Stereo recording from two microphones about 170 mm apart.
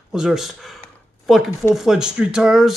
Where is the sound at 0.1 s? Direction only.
5° right (ahead or behind).